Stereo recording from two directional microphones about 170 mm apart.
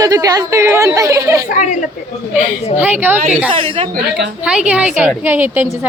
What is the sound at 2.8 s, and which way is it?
Speech, 10° right (ahead or behind).